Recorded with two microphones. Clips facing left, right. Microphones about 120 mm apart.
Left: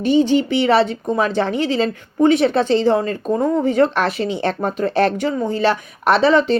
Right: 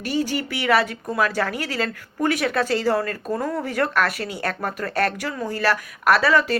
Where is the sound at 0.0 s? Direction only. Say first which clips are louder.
Left 9 dB; 25° left (ahead or behind).